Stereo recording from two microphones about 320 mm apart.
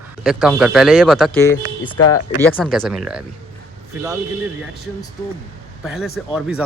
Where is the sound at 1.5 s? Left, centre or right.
Left.